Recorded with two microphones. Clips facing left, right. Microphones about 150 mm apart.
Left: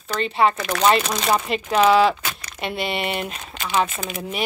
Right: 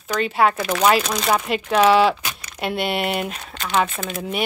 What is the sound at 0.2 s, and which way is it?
Speech, 5° right (ahead or behind).